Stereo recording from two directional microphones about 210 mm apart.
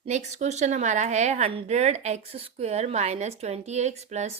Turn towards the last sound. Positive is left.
turn(degrees=-35)  # may be behind; listen again after turning